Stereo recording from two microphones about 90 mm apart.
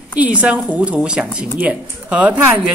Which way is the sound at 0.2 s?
15° right (ahead or behind).